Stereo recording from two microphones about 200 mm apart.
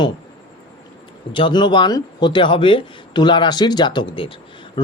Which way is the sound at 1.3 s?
25° left (ahead or behind).